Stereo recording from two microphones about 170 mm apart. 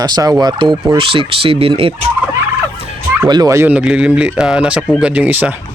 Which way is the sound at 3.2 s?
25° right (ahead or behind).